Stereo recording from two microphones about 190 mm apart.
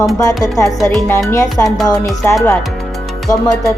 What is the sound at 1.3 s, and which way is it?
Speech, 15° left (ahead or behind).